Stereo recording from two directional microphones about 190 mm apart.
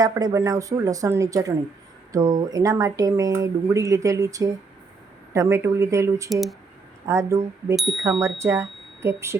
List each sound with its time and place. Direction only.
0.0 s speech: 20° right (ahead or behind)
6.3 s speech: centre (ahead or behind)
7.0 s speech: 15° right (ahead or behind)